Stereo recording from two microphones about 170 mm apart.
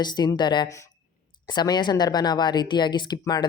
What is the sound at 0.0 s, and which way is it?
Speech, 25° left (ahead or behind).